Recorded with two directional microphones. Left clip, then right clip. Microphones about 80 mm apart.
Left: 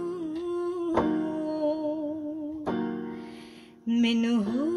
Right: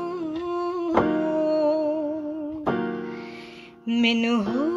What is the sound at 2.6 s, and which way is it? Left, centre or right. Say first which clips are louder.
Music: right 6 dB; centre.